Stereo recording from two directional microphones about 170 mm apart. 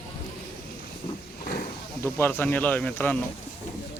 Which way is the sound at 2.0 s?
10° left (ahead or behind).